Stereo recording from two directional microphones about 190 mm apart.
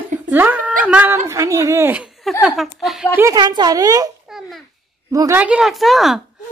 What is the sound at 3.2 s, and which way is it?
Speech, 20° right (ahead or behind).